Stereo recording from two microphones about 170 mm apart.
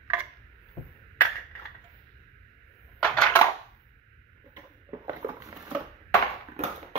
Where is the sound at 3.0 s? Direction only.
5° left (ahead or behind).